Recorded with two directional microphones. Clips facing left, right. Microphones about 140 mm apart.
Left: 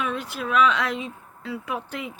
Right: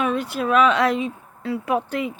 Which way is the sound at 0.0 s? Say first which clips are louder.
Right 6 dB; 55° right (ahead or behind).